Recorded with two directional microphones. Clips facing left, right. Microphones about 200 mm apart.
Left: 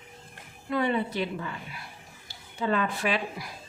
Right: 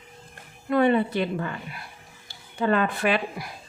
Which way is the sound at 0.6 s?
55° right (ahead or behind).